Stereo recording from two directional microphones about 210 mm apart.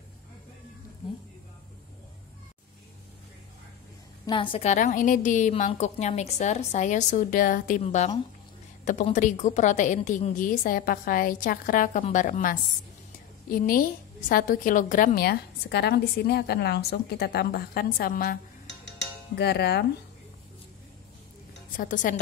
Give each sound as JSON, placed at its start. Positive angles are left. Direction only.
{"t": 4.3, "sound": "a woman's voice", "side_deg": 25}
{"t": 21.7, "sound": "a woman's voice", "side_deg": 40}